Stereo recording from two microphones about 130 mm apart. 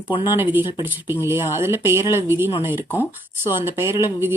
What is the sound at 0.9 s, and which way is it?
Speech, 15° right (ahead or behind).